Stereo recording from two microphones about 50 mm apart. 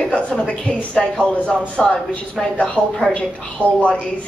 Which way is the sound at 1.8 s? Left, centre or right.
Centre.